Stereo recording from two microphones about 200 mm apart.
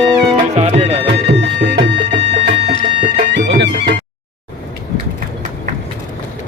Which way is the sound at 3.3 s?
60° right (ahead or behind).